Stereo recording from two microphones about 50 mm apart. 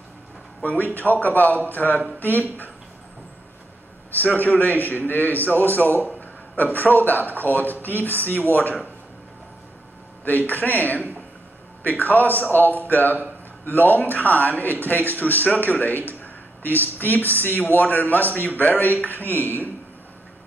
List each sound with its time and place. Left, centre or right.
0.9 s speech: left
4.1 s speech: left
10.2 s speech: left